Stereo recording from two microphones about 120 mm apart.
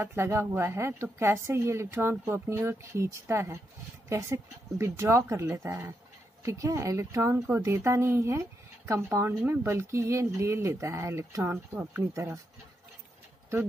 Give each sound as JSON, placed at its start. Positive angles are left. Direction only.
{"t": 0.0, "sound": "a woman's voice", "side_deg": -20}
{"t": 11.5, "sound": "a woman's voice", "side_deg": -15}